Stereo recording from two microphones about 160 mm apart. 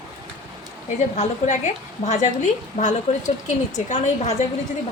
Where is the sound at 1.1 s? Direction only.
50° left (ahead or behind).